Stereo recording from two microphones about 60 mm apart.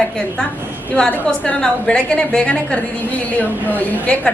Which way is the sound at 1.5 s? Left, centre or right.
Centre.